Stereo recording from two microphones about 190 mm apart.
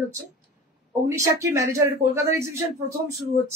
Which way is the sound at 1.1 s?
15° right (ahead or behind).